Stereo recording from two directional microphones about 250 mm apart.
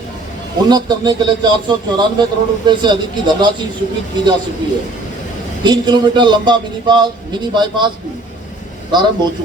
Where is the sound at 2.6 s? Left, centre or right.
Centre.